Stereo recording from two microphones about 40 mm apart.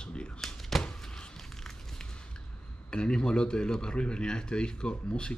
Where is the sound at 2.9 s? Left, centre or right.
Left.